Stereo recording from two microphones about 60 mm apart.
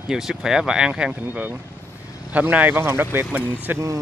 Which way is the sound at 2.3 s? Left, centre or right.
Right.